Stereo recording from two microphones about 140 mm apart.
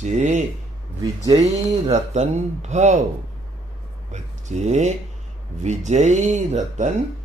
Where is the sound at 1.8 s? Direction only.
55° right (ahead or behind).